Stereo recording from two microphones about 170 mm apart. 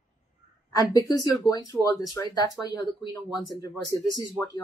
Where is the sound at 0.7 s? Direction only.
20° left (ahead or behind).